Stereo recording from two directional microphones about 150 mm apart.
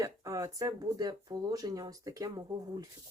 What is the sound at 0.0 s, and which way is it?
Speech, 20° right (ahead or behind).